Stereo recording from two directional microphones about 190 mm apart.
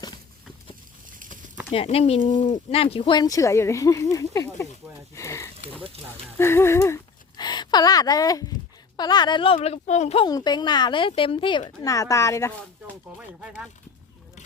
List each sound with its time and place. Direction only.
1.1 s a sound: 45° right (ahead or behind)
1.7 s speech: 30° left (ahead or behind)
5.1 s a sound: 15° left (ahead or behind)
6.4 s speech: 15° left (ahead or behind)
9.6 s speech: 35° left (ahead or behind)
10.2 s speech: 20° left (ahead or behind)